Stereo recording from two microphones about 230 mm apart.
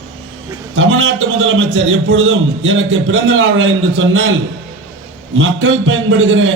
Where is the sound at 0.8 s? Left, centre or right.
Right.